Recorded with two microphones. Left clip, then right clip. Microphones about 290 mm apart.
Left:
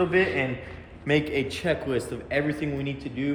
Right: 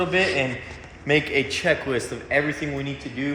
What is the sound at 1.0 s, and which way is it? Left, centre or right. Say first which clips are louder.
Speech: right 4 dB; centre.